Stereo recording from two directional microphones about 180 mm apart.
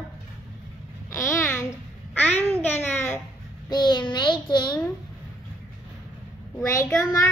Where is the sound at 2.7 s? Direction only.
10° left (ahead or behind).